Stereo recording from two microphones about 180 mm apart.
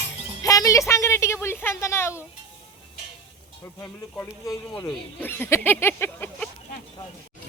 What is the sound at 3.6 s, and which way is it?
Speech, 15° left (ahead or behind).